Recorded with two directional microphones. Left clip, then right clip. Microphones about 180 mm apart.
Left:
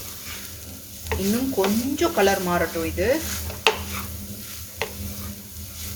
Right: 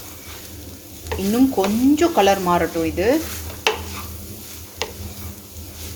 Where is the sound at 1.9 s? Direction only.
45° right (ahead or behind).